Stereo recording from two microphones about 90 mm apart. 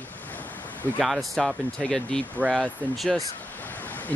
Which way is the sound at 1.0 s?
Centre (ahead or behind).